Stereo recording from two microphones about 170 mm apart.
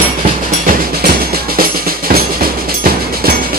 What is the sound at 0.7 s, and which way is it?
Music, 65° right (ahead or behind).